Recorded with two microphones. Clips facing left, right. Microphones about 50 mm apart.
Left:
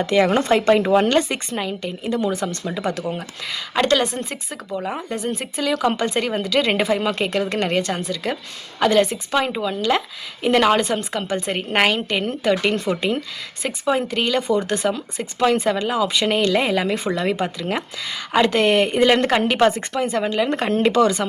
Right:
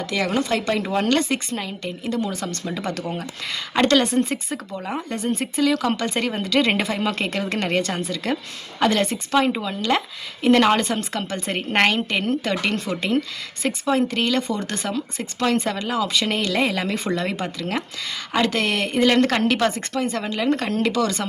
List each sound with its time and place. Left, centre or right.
0.0 s speech: left
0.9 s a woman's voice: centre
20.6 s speech: left